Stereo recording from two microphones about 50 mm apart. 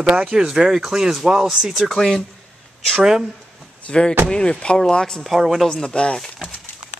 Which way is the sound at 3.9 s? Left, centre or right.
Centre.